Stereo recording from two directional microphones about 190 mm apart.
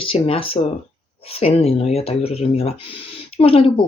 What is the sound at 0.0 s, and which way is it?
Speech, 30° left (ahead or behind).